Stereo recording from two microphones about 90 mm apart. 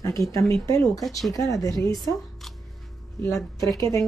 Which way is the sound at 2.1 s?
5° left (ahead or behind).